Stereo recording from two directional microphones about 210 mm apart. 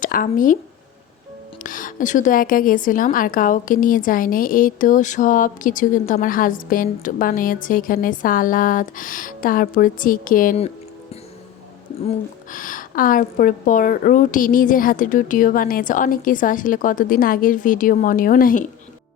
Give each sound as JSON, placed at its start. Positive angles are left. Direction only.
{"t": 0.0, "sound": "speech", "side_deg": 40}
{"t": 1.6, "sound": "a woman's voice", "side_deg": 40}
{"t": 12.0, "sound": "a woman's voice", "side_deg": 40}